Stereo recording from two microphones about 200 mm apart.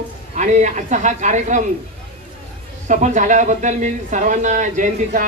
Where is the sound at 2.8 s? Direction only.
40° right (ahead or behind).